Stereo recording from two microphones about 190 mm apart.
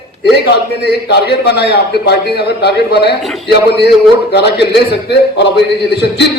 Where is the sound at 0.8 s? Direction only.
60° left (ahead or behind).